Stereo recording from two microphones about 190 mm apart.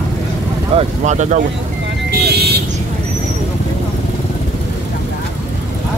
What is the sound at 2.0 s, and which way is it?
Vehicle, 60° right (ahead or behind).